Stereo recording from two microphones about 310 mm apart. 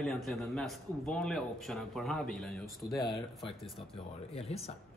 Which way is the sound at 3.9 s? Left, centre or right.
Centre.